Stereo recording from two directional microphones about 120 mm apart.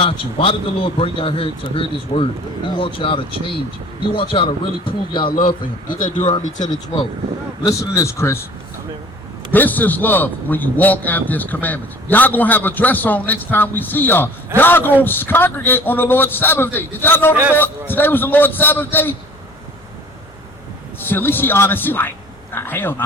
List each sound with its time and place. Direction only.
0.0 s speech: 50° left (ahead or behind)
7.6 s a man's voice: 30° left (ahead or behind)
9.5 s a man's voice: 15° left (ahead or behind)
21.0 s a man's voice: 15° left (ahead or behind)